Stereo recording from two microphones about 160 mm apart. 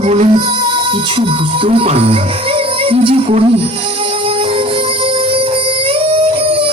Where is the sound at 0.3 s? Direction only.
30° right (ahead or behind).